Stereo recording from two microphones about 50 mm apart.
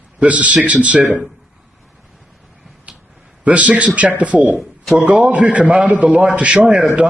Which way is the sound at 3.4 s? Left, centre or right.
Right.